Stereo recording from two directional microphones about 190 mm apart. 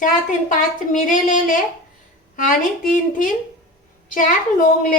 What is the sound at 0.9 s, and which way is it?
Speech, 45° left (ahead or behind).